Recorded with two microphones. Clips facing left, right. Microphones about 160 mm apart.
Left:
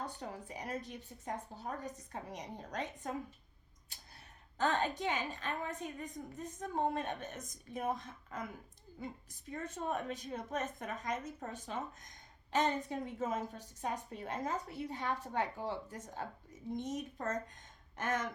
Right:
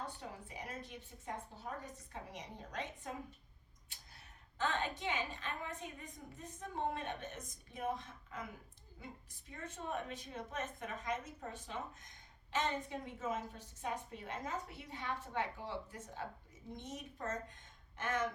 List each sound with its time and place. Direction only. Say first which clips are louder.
0.0 s a woman's voice: left 4 dB; 40° left (ahead or behind)
3.9 s a sound: left 3 dB; 40° left (ahead or behind)
4.5 s a woman's voice: left 5 dB; 40° left (ahead or behind)
9.5 s a woman's voice: left 5 dB; 40° left (ahead or behind)